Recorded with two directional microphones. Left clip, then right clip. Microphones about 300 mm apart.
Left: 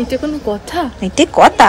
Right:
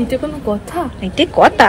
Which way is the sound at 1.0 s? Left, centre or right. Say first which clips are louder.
Left 2 dB; centre.